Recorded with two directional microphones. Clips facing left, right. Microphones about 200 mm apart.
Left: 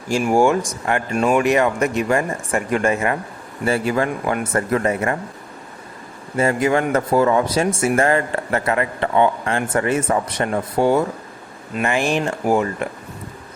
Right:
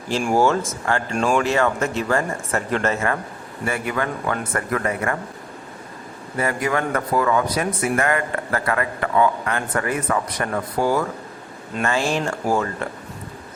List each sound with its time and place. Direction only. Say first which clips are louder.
0.1 s speech: left 3 dB; 10° left (ahead or behind)
1.4 s speech: left 3 dB; 15° left (ahead or behind)
3.7 s speech: left 5 dB; 30° left (ahead or behind)
6.3 s speech: left 5 dB; 25° left (ahead or behind)